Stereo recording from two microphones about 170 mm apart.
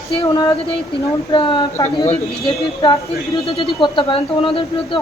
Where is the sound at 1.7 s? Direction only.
15° left (ahead or behind).